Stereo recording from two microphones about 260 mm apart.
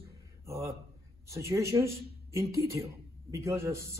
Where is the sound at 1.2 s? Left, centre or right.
Centre.